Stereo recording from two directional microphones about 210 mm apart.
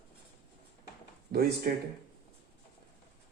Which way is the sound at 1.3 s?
45° right (ahead or behind).